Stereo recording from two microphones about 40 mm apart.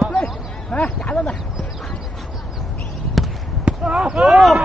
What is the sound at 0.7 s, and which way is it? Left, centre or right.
Speech, left.